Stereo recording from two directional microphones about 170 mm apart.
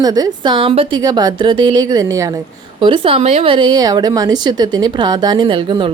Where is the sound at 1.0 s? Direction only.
25° right (ahead or behind).